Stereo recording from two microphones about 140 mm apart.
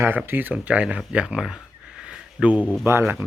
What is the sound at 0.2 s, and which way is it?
Speech, 15° right (ahead or behind).